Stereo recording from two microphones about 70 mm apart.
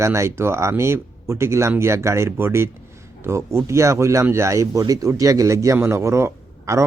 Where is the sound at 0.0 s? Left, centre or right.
Right.